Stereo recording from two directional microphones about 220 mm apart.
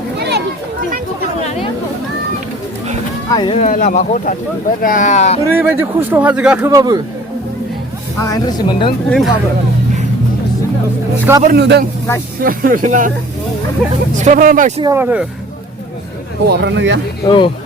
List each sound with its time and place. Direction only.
0.2 s a sound: 50° right (ahead or behind)
3.2 s speech: 20° left (ahead or behind)
3.6 s speech: 35° left (ahead or behind)
5.5 s a man's voice: 10° right (ahead or behind)
8.2 s speech: 15° left (ahead or behind)
9.0 s speech: centre (ahead or behind)
11.4 s a man's voice: 50° right (ahead or behind)
14.2 s speech: 35° right (ahead or behind)
14.8 s a man's voice: 15° right (ahead or behind)
16.5 s speech: 55° right (ahead or behind)
17.2 s speech: 20° left (ahead or behind)